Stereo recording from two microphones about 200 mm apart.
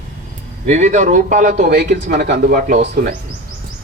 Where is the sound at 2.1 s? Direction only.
55° right (ahead or behind).